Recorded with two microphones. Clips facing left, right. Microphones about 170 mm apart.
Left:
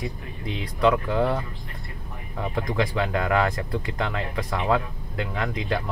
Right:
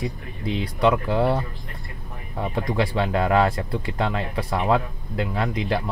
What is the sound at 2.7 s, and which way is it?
Speech, 30° right (ahead or behind).